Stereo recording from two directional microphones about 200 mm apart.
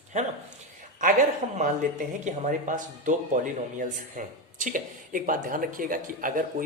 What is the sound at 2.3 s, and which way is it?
Speech, 40° right (ahead or behind).